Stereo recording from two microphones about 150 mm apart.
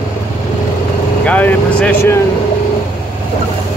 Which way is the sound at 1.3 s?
10° left (ahead or behind).